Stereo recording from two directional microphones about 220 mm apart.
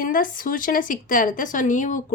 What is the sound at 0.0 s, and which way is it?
A woman's voice, 40° left (ahead or behind).